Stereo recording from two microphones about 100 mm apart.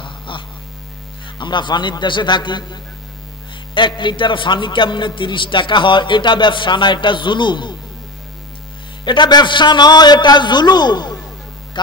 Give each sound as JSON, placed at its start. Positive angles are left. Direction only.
{"t": 0.3, "sound": "mains hum", "side_deg": 55}
{"t": 1.4, "sound": "a man's voice", "side_deg": 50}
{"t": 9.0, "sound": "a man's voice", "side_deg": 50}
{"t": 11.7, "sound": "a sound", "side_deg": 50}